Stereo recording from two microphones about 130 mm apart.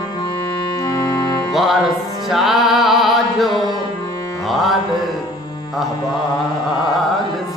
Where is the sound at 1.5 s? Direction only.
Centre (ahead or behind).